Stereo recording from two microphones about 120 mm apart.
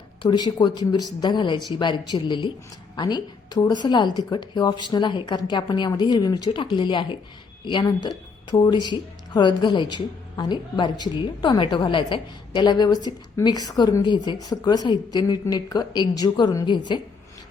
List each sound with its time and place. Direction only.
0.2 s speech: 35° left (ahead or behind)